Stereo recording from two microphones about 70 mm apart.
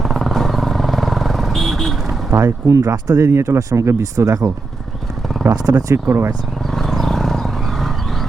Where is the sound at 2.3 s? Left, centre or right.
Right.